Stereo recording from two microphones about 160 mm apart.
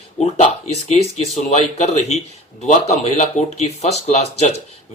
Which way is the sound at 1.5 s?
45° left (ahead or behind).